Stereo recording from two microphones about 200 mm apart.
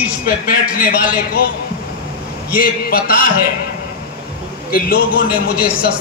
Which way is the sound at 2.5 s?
45° left (ahead or behind).